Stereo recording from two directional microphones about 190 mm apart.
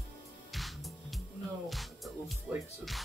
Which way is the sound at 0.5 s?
Centre (ahead or behind).